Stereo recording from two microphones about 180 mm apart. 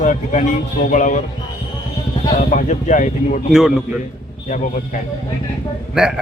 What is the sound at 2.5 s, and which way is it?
Speech, 45° left (ahead or behind).